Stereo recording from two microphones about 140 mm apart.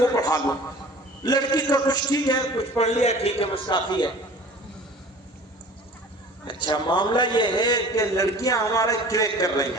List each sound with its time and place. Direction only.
0.0 s a sound: 30° left (ahead or behind)
1.2 s a man's voice: 30° left (ahead or behind)
2.7 s a man's voice: 55° left (ahead or behind); by 4.1 s 35° left (ahead or behind)
6.4 s a man's voice: 35° left (ahead or behind)